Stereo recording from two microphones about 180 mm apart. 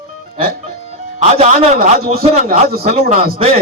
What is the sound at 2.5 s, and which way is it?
Speech, 55° right (ahead or behind).